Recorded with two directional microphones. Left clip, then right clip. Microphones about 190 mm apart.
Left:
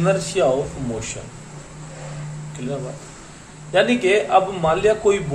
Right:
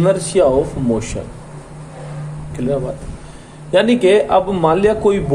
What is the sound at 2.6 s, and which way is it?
Speech, 45° right (ahead or behind).